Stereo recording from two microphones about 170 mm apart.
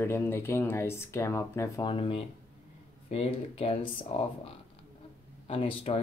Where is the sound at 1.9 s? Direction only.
30° left (ahead or behind).